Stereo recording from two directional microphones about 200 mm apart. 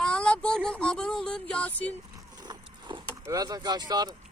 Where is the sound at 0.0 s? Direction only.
5° left (ahead or behind).